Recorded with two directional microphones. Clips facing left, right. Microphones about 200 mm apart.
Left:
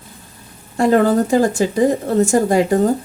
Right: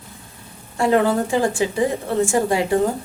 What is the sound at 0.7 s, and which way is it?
Speech, 40° left (ahead or behind).